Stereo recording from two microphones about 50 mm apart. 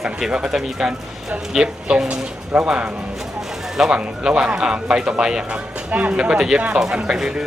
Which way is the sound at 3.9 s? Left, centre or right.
Centre.